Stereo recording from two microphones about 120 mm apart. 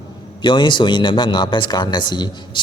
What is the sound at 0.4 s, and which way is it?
Speech, 40° left (ahead or behind).